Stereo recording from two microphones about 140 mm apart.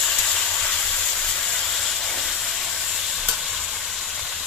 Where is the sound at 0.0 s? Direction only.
5° left (ahead or behind).